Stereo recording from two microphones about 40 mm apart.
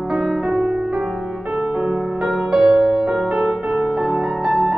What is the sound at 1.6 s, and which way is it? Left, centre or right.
Music, right.